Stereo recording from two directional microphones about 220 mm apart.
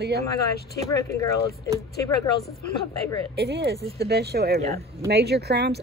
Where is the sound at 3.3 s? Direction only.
50° right (ahead or behind).